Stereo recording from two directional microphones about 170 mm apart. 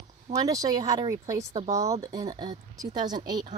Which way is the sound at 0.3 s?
20° right (ahead or behind).